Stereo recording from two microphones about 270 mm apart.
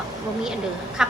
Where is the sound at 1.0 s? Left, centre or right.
Centre.